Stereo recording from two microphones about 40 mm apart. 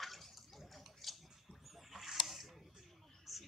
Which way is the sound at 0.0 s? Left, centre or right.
Centre.